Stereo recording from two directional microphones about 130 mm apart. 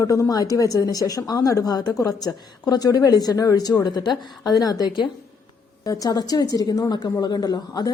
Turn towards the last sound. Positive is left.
turn(degrees=30)  # may be behind; listen again after turning